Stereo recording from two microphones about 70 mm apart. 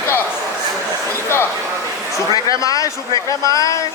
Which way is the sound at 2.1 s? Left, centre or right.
Left.